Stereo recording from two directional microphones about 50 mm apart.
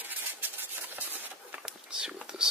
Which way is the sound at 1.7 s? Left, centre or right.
Centre.